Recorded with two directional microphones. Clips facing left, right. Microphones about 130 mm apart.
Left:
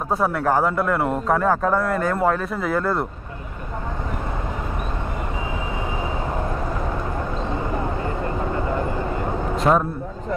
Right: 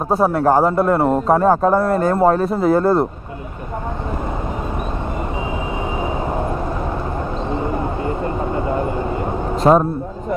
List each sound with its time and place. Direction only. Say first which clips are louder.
0.1 s a man's voice: right 6 dB; 30° right (ahead or behind)
8.2 s vehicle: right 3 dB; 25° right (ahead or behind)
9.6 s a man's voice: right 6 dB; 35° right (ahead or behind)